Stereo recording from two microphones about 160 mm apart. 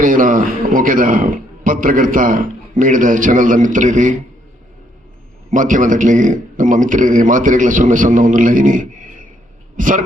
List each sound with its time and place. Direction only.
0.0 s a man's voice: 55° right (ahead or behind)
5.5 s a man's voice: 55° right (ahead or behind)